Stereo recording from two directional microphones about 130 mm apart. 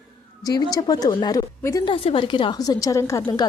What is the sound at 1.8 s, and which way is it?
A woman's voice, 45° left (ahead or behind).